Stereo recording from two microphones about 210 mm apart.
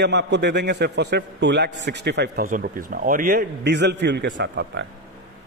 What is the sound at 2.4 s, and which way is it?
A man's voice, 40° right (ahead or behind).